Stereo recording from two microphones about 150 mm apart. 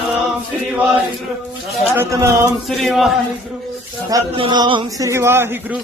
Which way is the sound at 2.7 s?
Centre (ahead or behind).